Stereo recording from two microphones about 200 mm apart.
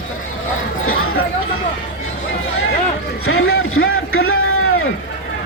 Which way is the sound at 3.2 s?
90° left.